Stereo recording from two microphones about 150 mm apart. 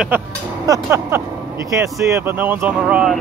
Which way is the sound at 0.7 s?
15° right (ahead or behind).